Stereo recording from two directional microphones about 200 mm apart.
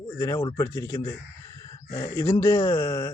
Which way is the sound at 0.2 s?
20° left (ahead or behind).